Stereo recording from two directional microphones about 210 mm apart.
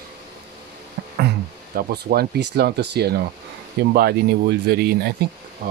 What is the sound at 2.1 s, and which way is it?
Speech, 50° right (ahead or behind).